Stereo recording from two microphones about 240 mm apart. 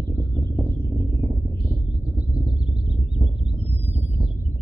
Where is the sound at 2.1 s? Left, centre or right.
Centre.